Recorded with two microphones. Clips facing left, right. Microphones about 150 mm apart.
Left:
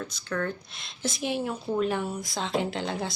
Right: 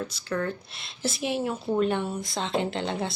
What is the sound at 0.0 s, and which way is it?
Speech, 5° right (ahead or behind).